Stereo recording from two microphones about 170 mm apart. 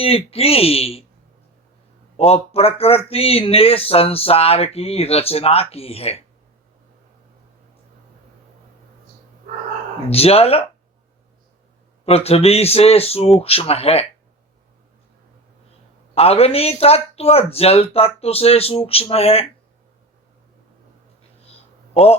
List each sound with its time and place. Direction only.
0.0 s speech: 35° left (ahead or behind)
2.1 s speech: 35° left (ahead or behind)
10.1 s speech: 35° left (ahead or behind)
12.0 s speech: 35° left (ahead or behind)
16.1 s speech: 35° left (ahead or behind)
21.9 s speech: 35° left (ahead or behind)